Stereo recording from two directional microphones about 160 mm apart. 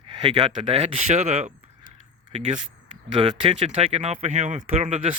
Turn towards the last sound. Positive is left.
turn(degrees=-40)  # may be behind; listen again after turning